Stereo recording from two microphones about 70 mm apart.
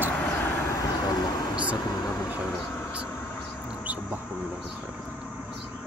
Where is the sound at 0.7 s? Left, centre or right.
Left.